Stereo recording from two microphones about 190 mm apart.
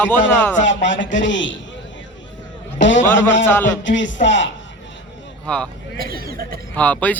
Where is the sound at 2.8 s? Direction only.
75° left (ahead or behind).